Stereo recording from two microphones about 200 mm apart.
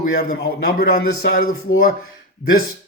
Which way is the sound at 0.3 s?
45° left (ahead or behind).